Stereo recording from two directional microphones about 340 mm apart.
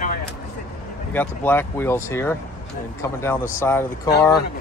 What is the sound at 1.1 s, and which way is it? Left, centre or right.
Speech, centre.